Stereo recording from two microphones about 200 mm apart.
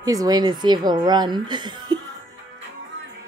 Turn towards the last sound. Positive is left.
turn(degrees=-20)  # may be behind; listen again after turning